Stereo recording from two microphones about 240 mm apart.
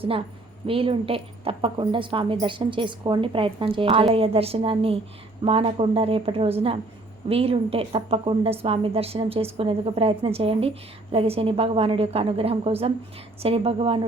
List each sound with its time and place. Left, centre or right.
0.7 s a woman's voice: right